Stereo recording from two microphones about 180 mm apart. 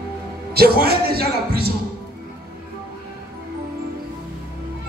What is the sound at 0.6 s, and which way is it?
Speech, 60° right (ahead or behind).